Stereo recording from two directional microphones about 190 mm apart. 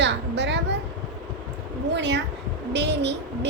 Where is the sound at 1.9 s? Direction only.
65° right (ahead or behind).